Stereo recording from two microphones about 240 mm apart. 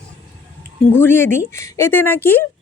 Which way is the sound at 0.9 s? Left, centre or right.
Centre.